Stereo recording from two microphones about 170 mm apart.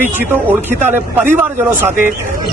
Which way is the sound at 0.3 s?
10° right (ahead or behind).